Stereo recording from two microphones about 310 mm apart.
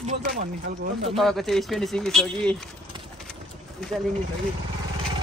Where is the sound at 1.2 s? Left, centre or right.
Centre.